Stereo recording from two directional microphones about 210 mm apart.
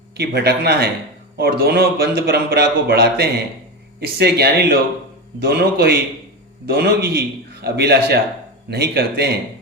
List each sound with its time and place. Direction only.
0.2 s speech: 50° right (ahead or behind)